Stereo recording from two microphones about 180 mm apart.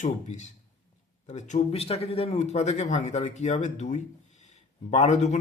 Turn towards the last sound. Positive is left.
turn(degrees=40)  # may be behind; listen again after turning